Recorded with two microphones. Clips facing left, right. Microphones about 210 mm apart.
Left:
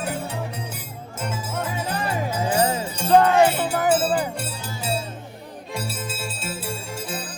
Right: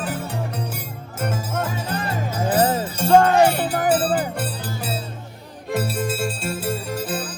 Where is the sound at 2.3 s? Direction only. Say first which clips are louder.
Right 4 dB; 50° right (ahead or behind).